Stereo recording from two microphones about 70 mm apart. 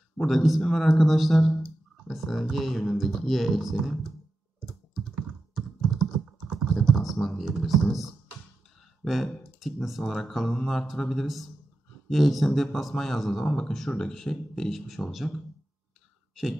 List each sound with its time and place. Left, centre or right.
0.2 s a man's voice: centre
5.9 s computer keyboard: centre
6.6 s computer keyboard: centre
7.4 s a man's voice: centre